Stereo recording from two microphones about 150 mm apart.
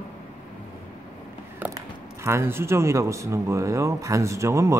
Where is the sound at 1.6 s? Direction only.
10° right (ahead or behind).